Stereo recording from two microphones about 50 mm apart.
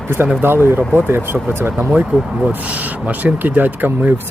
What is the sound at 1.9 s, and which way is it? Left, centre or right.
Speech, right.